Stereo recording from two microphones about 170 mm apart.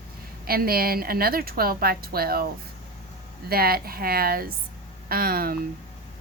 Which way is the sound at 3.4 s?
65° right (ahead or behind).